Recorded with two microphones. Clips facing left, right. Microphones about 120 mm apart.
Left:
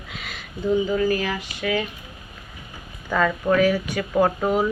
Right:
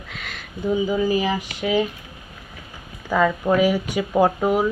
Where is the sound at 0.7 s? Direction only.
15° right (ahead or behind).